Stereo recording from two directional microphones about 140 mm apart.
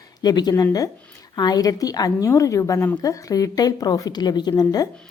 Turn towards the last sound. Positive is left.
turn(degrees=30)  # may be behind; listen again after turning